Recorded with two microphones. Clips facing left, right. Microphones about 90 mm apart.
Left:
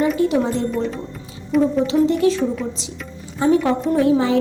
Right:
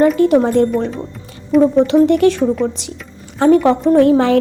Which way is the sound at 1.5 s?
Centre (ahead or behind).